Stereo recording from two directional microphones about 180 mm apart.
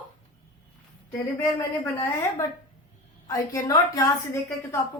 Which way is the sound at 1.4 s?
15° left (ahead or behind).